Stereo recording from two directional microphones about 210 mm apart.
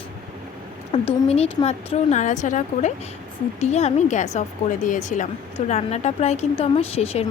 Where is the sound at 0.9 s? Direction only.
30° left (ahead or behind).